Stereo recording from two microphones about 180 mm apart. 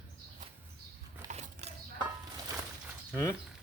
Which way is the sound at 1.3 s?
35° right (ahead or behind).